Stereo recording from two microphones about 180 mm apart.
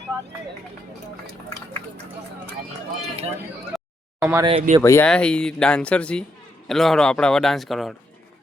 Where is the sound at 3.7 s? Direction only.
Centre (ahead or behind).